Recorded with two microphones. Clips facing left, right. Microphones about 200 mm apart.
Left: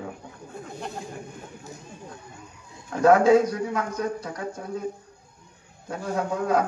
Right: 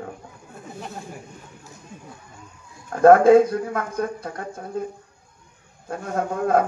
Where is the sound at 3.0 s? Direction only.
55° right (ahead or behind).